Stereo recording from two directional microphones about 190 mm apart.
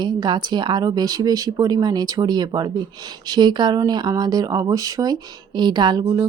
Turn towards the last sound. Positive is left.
turn(degrees=-20)  # may be behind; listen again after turning